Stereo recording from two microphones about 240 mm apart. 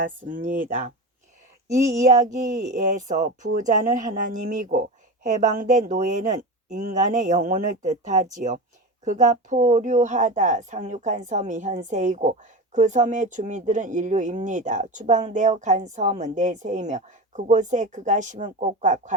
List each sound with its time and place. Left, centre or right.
0.4 s speech: right
2.0 s speech: right